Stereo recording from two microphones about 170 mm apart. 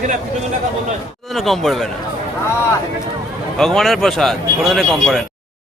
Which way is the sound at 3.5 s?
Centre (ahead or behind).